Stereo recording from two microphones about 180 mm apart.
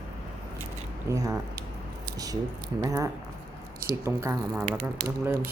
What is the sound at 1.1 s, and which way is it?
Speech, 20° right (ahead or behind).